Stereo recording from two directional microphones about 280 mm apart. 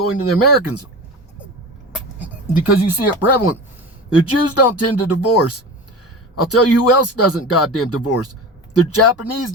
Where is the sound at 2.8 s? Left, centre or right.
Left.